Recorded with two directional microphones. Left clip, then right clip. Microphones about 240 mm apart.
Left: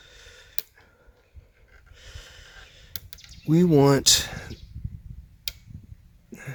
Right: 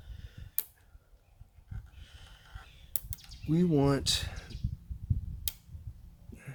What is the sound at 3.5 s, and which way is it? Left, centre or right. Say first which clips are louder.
Speech: left 10 dB; left.